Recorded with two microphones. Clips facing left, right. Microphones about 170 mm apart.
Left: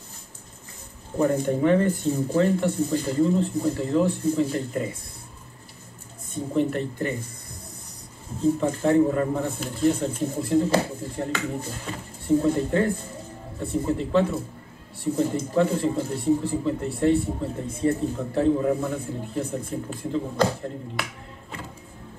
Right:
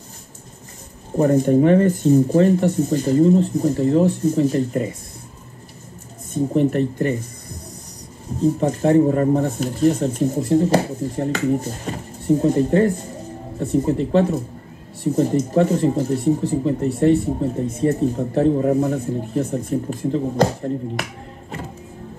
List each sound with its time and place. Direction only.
1.1 s speech: 40° right (ahead or behind)
6.5 s speech: 40° right (ahead or behind)
8.5 s speech: 40° right (ahead or behind)